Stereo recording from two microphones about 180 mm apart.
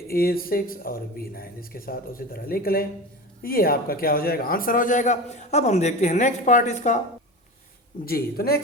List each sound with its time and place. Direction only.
0.1 s a man's voice: 55° left (ahead or behind)
8.0 s a man's voice: 55° left (ahead or behind)